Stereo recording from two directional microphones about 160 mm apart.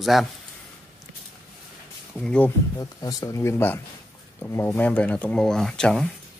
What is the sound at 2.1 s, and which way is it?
Speech, 5° left (ahead or behind).